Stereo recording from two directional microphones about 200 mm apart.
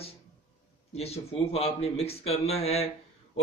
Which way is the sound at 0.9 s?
30° left (ahead or behind).